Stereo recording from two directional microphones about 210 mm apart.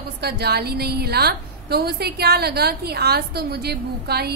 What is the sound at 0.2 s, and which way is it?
A woman's voice, 50° right (ahead or behind).